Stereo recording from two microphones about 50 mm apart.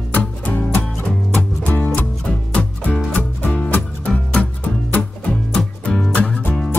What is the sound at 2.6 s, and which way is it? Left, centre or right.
Music, left.